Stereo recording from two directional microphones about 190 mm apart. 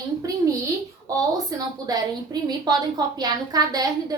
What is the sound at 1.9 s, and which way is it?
A woman's voice, 20° right (ahead or behind).